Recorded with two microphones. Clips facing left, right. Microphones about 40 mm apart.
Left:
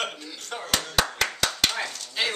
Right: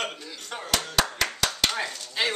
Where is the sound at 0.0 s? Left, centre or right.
Centre.